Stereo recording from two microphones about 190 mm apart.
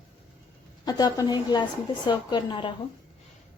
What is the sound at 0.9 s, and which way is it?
A woman's voice, 20° left (ahead or behind).